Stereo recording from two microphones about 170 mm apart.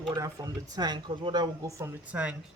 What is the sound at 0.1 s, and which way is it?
Speech, 20° right (ahead or behind).